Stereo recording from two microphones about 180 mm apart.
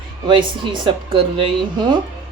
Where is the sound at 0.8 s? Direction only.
30° right (ahead or behind).